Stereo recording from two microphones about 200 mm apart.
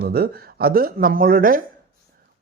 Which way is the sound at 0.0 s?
50° right (ahead or behind).